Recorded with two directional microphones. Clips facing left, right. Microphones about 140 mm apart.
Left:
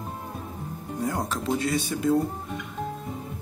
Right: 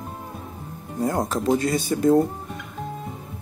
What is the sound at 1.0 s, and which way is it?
Speech, 45° right (ahead or behind).